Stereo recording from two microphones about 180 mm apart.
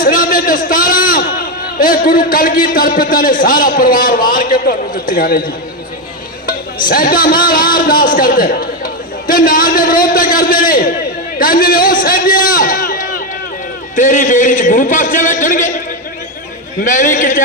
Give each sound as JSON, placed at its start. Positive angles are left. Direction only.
{"t": 0.0, "sound": "a man's voice", "side_deg": 50}
{"t": 6.8, "sound": "a man's voice", "side_deg": 55}
{"t": 16.8, "sound": "a man's voice", "side_deg": 45}